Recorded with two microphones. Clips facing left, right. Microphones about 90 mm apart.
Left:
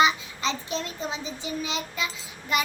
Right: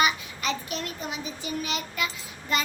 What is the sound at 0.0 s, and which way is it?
A child's voice, 25° left (ahead or behind).